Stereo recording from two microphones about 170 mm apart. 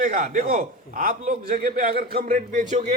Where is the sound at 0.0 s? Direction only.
50° right (ahead or behind).